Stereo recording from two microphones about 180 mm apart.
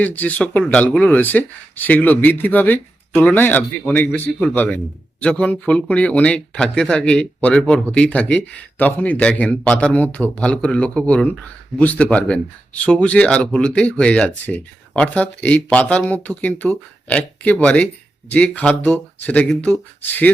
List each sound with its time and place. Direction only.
0.0 s speech: 10° left (ahead or behind)